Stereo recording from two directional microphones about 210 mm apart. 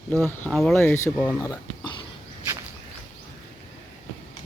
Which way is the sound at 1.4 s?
15° left (ahead or behind).